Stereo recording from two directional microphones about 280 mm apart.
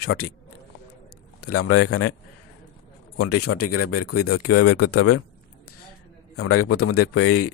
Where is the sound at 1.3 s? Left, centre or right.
Left.